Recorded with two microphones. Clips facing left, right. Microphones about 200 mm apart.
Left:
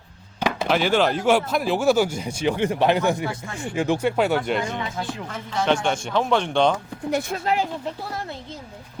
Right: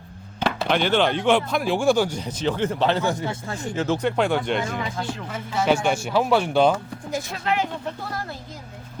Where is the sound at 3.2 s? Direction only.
35° right (ahead or behind).